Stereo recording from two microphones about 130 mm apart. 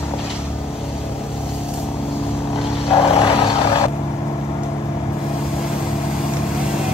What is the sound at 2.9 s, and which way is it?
Vehicle, 45° left (ahead or behind).